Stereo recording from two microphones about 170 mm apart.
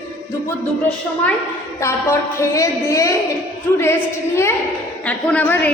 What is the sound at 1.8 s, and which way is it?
A woman's voice, 15° left (ahead or behind).